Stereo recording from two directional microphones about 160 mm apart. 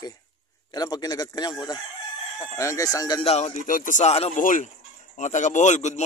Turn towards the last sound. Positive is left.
turn(degrees=45)  # may be behind; listen again after turning